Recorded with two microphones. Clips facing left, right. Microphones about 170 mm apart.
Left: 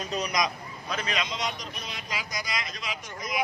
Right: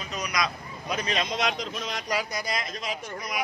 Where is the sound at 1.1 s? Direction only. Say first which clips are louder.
Right 3 dB; 50° right (ahead or behind).